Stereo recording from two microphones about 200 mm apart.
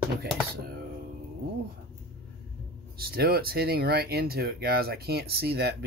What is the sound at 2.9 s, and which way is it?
Speech, 50° right (ahead or behind).